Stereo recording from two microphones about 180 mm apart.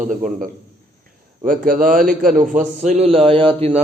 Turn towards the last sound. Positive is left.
turn(degrees=-30)  # may be behind; listen again after turning